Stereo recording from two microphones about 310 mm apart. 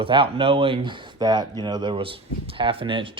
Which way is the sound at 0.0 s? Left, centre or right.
Centre.